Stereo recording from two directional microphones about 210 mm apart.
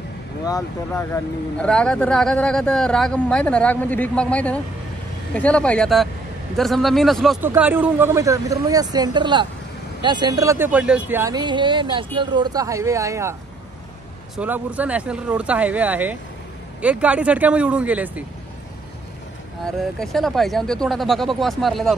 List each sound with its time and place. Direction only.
0.5 s speech: 15° left (ahead or behind); by 18.2 s 5° right (ahead or behind)
19.6 s speech: centre (ahead or behind)